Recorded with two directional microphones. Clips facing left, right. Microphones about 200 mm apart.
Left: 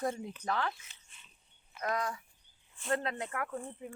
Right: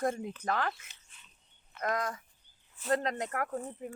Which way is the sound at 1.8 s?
45° right (ahead or behind).